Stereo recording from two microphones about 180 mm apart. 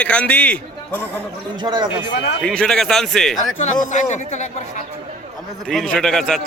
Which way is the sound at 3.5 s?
45° left (ahead or behind).